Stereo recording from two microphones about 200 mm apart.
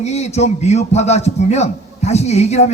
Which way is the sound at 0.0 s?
35° left (ahead or behind).